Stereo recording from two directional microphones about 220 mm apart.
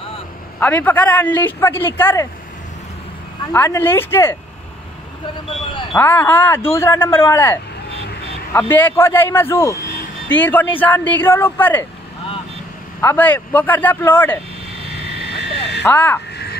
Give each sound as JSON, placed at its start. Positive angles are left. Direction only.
{"t": 0.6, "sound": "speech", "side_deg": 10}
{"t": 3.5, "sound": "speech", "side_deg": 10}
{"t": 5.9, "sound": "speech", "side_deg": 10}
{"t": 13.0, "sound": "speech", "side_deg": 10}
{"t": 15.2, "sound": "frog", "side_deg": 50}
{"t": 15.8, "sound": "speech", "side_deg": 10}